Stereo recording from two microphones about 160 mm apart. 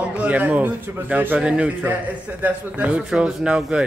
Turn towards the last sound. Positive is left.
turn(degrees=-5)  # may be behind; listen again after turning